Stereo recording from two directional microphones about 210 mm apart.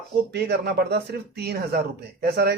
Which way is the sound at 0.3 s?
50° right (ahead or behind).